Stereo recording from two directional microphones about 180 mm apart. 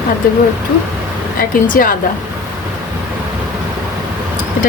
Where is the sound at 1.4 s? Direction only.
50° left (ahead or behind).